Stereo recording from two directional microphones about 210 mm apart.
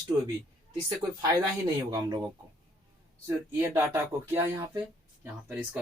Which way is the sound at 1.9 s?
20° right (ahead or behind).